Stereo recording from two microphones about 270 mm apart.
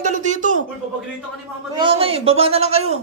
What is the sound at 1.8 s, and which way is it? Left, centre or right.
A man's voice, centre.